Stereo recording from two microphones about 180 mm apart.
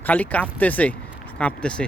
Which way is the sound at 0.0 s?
10° left (ahead or behind).